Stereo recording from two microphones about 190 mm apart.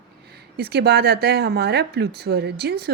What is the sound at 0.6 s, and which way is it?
Speech, 60° right (ahead or behind).